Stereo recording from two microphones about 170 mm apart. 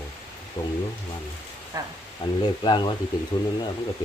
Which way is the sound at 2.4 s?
25° left (ahead or behind).